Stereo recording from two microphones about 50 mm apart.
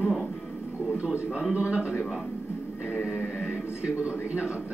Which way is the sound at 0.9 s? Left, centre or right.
Right.